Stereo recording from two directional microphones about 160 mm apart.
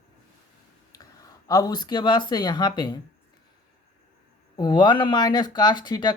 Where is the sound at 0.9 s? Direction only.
20° left (ahead or behind).